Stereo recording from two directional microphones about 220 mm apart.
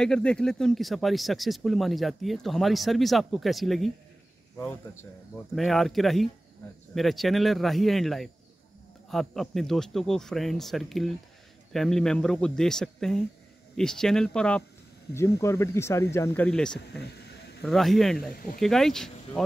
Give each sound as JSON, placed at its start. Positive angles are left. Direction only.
{"t": 0.0, "sound": "speech", "side_deg": 5}
{"t": 5.6, "sound": "speech", "side_deg": 0}
{"t": 17.0, "sound": "a sound", "side_deg": 50}
{"t": 17.6, "sound": "speech", "side_deg": 0}
{"t": 18.3, "sound": "speech", "side_deg": 40}
{"t": 18.6, "sound": "speech", "side_deg": 0}